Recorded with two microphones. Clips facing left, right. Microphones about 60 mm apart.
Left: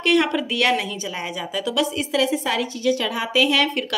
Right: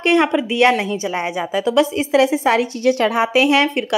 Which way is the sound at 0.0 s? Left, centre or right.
Right.